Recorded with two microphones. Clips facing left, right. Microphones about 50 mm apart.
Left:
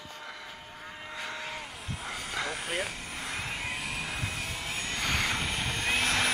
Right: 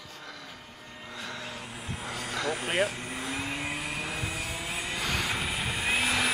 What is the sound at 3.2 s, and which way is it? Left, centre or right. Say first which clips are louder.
Vehicle: right 2 dB; centre.